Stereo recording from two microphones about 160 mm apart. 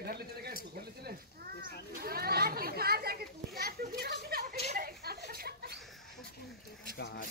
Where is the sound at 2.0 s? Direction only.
70° right (ahead or behind).